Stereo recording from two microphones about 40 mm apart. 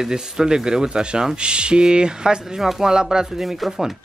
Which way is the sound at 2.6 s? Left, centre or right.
Centre.